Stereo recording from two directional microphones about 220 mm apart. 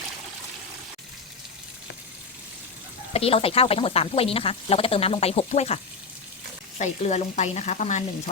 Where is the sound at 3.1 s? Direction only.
25° left (ahead or behind).